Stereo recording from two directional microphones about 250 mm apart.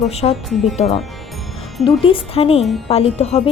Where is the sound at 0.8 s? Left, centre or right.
Left.